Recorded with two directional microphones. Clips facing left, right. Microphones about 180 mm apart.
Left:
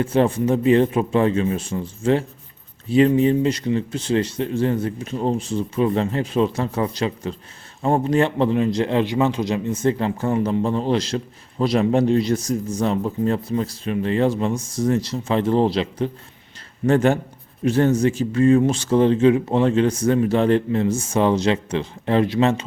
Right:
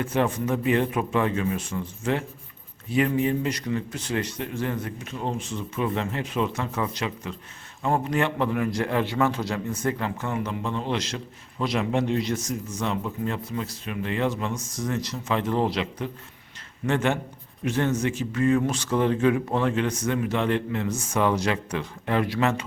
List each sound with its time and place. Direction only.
0.0 s a man's voice: 30° left (ahead or behind)